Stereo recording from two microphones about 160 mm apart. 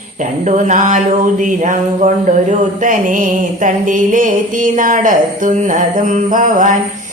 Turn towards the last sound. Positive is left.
turn(degrees=-55)  # may be behind; listen again after turning